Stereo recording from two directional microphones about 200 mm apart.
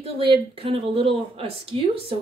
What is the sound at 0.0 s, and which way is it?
Speech, 25° right (ahead or behind).